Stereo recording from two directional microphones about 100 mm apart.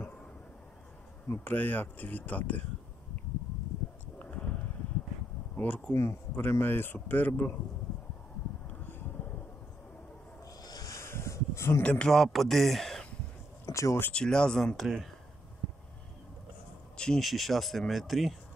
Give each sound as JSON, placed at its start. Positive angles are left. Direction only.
{"t": 1.3, "sound": "speech", "side_deg": 20}
{"t": 4.2, "sound": "a sound", "side_deg": 15}
{"t": 5.6, "sound": "speech", "side_deg": 15}
{"t": 10.6, "sound": "a sound", "side_deg": 40}
{"t": 11.8, "sound": "speech", "side_deg": 10}
{"t": 13.7, "sound": "speech", "side_deg": 30}
{"t": 14.0, "sound": "speech", "side_deg": 10}
{"t": 16.9, "sound": "speech", "side_deg": 5}